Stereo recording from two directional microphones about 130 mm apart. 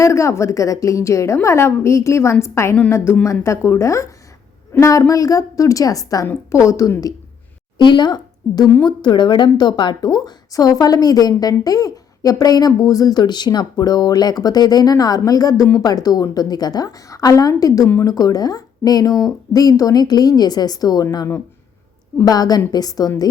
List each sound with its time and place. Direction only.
0.0 s speech: 25° left (ahead or behind)
17.8 s speech: 15° left (ahead or behind)
18.1 s speech: 30° left (ahead or behind)